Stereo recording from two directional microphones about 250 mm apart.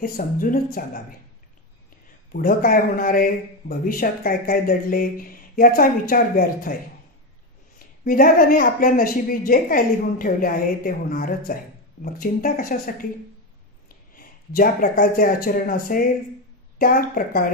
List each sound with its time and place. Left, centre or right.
0.0 s speech: left
2.3 s speech: left
8.0 s speech: left
14.1 s speech: left